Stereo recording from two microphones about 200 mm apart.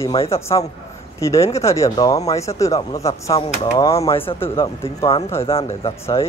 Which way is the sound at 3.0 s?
30° left (ahead or behind).